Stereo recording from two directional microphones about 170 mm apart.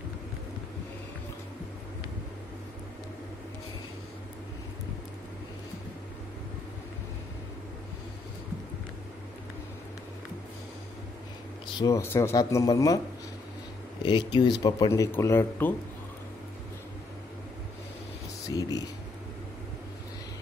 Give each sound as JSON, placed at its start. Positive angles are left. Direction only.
{"t": 11.8, "sound": "speech", "side_deg": 15}
{"t": 14.0, "sound": "speech", "side_deg": 25}
{"t": 18.5, "sound": "a sound", "side_deg": 20}